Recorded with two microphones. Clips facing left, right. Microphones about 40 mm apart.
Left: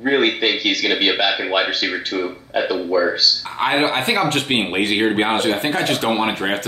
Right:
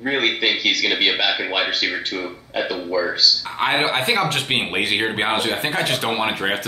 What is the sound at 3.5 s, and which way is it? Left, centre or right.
Speech, centre.